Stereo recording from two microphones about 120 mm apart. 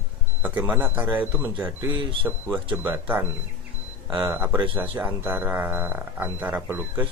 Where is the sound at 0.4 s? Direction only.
15° right (ahead or behind).